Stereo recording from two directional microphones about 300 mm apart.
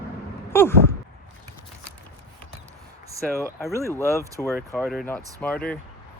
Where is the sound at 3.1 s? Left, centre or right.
Centre.